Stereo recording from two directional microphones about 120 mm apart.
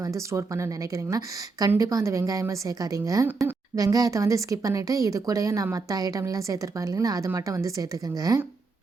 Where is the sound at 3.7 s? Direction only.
30° right (ahead or behind).